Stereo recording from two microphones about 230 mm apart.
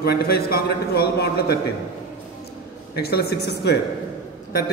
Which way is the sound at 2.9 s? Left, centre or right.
Left.